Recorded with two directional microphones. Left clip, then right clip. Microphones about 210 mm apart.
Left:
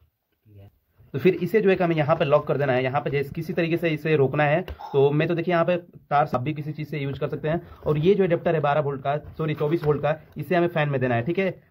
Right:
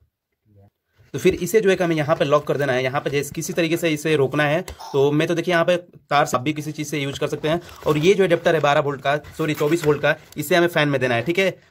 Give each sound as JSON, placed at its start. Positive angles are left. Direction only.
{"t": 1.1, "sound": "speech", "side_deg": -35}